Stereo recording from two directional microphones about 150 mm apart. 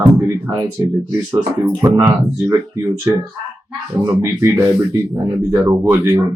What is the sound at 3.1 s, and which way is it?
Speech, 15° right (ahead or behind).